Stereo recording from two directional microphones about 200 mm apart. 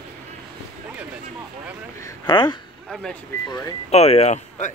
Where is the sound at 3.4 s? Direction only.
20° left (ahead or behind).